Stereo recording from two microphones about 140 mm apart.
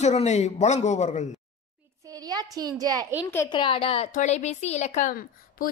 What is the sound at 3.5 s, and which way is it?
Speech, 35° left (ahead or behind).